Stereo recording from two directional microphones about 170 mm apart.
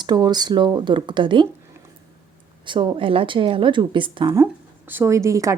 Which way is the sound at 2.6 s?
30° right (ahead or behind).